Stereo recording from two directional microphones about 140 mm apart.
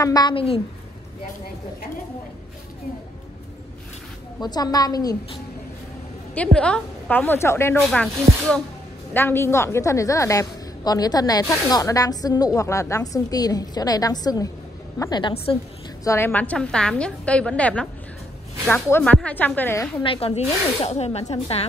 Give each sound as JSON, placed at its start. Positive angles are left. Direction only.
{"t": 0.0, "sound": "a woman's voice", "side_deg": 30}
{"t": 4.4, "sound": "a woman's voice", "side_deg": 30}
{"t": 6.3, "sound": "a woman's voice", "side_deg": 10}
{"t": 7.8, "sound": "speech", "side_deg": 5}
{"t": 9.1, "sound": "a woman's voice", "side_deg": 15}
{"t": 16.3, "sound": "a woman's voice", "side_deg": 10}
{"t": 20.0, "sound": "speech", "side_deg": 40}